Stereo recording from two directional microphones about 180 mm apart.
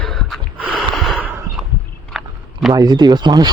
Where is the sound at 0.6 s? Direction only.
Centre (ahead or behind).